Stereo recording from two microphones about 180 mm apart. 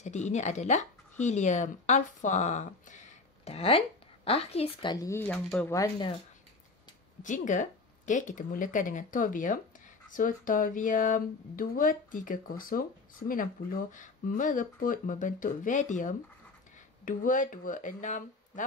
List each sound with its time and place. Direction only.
0.0 s a woman's voice: 40° left (ahead or behind)
4.9 s speech: 15° left (ahead or behind)
5.8 s speech: 25° left (ahead or behind)
7.2 s speech: 45° left (ahead or behind)